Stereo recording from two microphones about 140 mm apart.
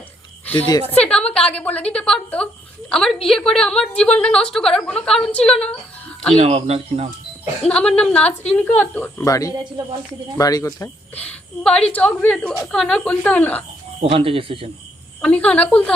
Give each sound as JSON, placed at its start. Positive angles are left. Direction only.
{"t": 0.4, "sound": "a woman's voice", "side_deg": 10}
{"t": 6.3, "sound": "speech", "side_deg": -50}
{"t": 7.6, "sound": "a woman's voice", "side_deg": 5}
{"t": 11.2, "sound": "a woman's voice", "side_deg": 10}
{"t": 14.0, "sound": "speech", "side_deg": -40}
{"t": 15.2, "sound": "a woman's voice", "side_deg": 10}